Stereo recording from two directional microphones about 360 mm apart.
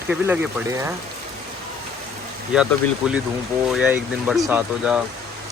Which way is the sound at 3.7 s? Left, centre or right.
Centre.